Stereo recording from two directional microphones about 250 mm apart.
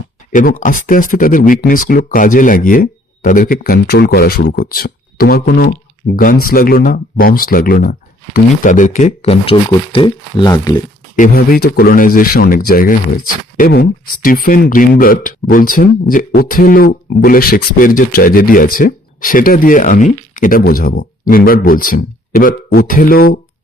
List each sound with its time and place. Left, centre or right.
0.3 s speech: left; by 10.8 s centre
11.6 s speech: left